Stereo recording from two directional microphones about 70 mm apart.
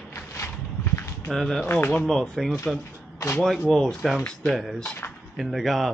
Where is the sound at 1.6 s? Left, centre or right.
Left.